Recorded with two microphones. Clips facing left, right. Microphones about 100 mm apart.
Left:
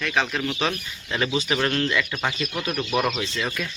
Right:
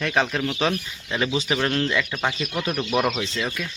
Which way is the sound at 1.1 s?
5° right (ahead or behind).